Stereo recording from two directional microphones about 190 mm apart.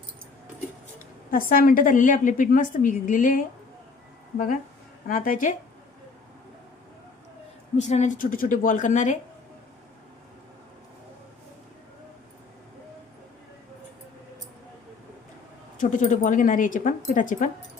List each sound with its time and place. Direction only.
1.3 s a woman's voice: 45° left (ahead or behind)
5.0 s a woman's voice: 45° left (ahead or behind)
7.8 s a woman's voice: 40° left (ahead or behind)
15.8 s a woman's voice: 40° left (ahead or behind)